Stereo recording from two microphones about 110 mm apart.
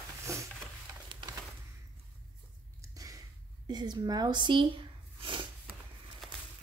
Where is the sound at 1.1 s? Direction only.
50° right (ahead or behind).